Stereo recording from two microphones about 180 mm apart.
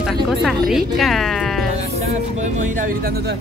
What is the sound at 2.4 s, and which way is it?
Speech, 50° right (ahead or behind).